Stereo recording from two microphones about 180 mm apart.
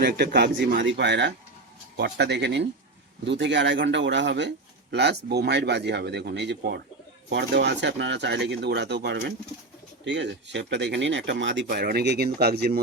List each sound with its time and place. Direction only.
0.0 s a man's voice: 65° right (ahead or behind)
3.2 s a man's voice: 85° right; by 9.3 s 65° right (ahead or behind)
10.0 s speech: 80° right
11.7 s speech: 55° right (ahead or behind)